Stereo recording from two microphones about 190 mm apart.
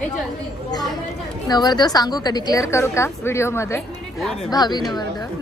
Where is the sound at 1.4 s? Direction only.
20° left (ahead or behind).